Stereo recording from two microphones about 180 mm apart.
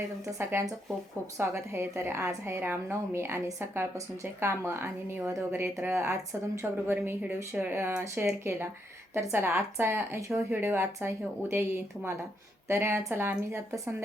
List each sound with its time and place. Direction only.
0.3 s a woman's voice: 15° right (ahead or behind)
12.6 s a woman's voice: 15° right (ahead or behind)